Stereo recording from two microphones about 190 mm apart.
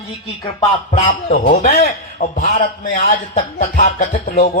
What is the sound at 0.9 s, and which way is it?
A man's voice, 40° left (ahead or behind).